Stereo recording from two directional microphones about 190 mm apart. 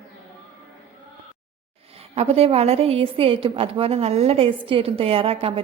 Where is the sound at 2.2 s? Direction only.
30° right (ahead or behind).